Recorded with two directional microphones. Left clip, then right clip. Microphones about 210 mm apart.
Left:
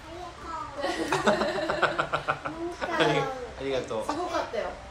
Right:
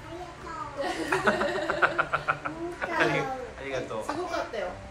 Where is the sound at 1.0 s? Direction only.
15° left (ahead or behind).